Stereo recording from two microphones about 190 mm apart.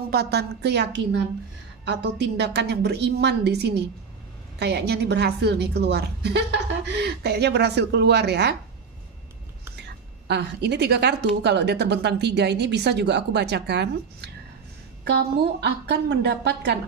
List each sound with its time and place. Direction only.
0.1 s speech: 60° right (ahead or behind)
10.2 s speech: 60° right (ahead or behind)